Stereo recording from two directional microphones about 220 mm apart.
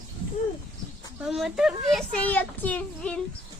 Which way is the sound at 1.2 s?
Centre (ahead or behind).